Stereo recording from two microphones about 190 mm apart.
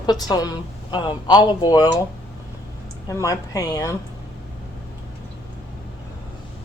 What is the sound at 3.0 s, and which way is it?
Speech, 15° left (ahead or behind).